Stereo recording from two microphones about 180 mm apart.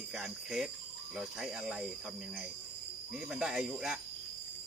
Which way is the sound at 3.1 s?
5° right (ahead or behind).